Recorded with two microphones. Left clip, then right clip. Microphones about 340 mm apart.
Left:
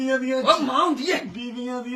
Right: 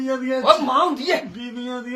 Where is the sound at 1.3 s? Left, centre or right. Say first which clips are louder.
Right 1 dB; centre.